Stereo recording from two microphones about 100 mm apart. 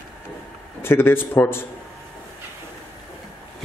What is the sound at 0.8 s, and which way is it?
Speech, 25° left (ahead or behind).